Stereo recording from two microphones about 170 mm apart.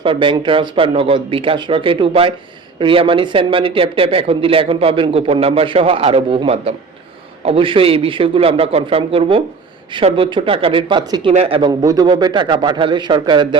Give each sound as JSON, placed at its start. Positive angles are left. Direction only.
{"t": 0.0, "sound": "speech", "side_deg": -30}
{"t": 11.7, "sound": "a man's voice", "side_deg": -20}